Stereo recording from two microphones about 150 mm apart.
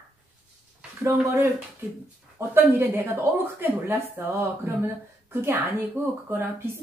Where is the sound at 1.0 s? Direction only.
20° right (ahead or behind).